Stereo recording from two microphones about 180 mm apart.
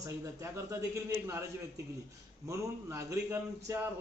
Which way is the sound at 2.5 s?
15° right (ahead or behind).